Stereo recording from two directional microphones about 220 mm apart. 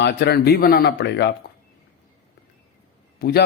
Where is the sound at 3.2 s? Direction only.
45° left (ahead or behind).